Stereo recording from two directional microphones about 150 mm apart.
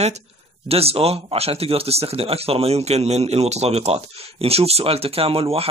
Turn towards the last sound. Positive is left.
turn(degrees=-40)  # may be behind; listen again after turning